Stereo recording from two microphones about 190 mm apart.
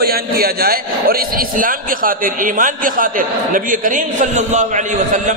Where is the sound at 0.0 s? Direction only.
55° right (ahead or behind).